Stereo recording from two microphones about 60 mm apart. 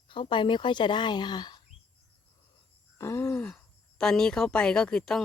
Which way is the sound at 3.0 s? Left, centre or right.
Left.